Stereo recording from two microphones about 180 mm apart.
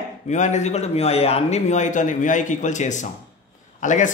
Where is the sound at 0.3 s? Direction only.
40° left (ahead or behind).